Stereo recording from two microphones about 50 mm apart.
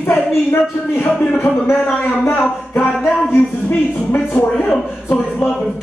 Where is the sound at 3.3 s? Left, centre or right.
Left.